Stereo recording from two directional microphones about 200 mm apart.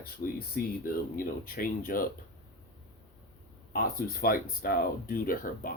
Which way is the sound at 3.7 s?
45° left (ahead or behind).